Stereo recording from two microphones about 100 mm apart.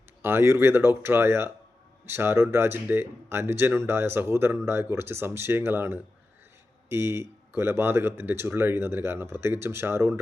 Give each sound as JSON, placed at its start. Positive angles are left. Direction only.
{"t": 0.2, "sound": "speech", "side_deg": -25}